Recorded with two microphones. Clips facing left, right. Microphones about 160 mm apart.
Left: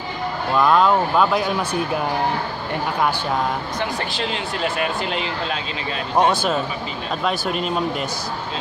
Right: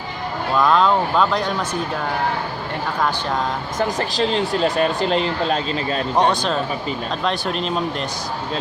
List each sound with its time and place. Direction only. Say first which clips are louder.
0.5 s speech: even; 5° left (ahead or behind)
3.8 s speech: right 4 dB; 35° right (ahead or behind)
6.1 s speech: left 1 dB; 5° left (ahead or behind)